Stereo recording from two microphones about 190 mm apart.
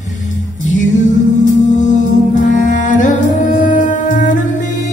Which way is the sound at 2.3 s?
40° left (ahead or behind).